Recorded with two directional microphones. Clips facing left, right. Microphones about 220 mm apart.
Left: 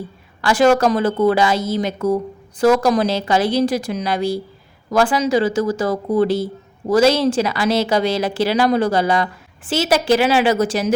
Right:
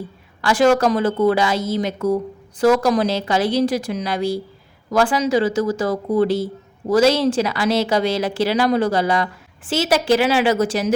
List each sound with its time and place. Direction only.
0.4 s speech: 35° left (ahead or behind)